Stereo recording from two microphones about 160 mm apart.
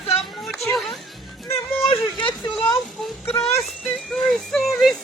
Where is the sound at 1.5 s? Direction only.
35° left (ahead or behind).